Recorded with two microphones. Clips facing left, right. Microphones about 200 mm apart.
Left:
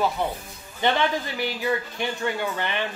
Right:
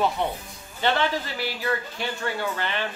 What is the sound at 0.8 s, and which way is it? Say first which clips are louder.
Speech: left 1 dB; 15° left (ahead or behind).